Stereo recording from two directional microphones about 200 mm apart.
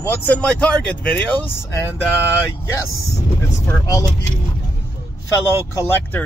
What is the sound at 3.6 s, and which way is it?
Speech, 15° left (ahead or behind).